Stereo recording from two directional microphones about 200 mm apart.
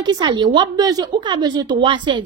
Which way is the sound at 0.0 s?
20° right (ahead or behind).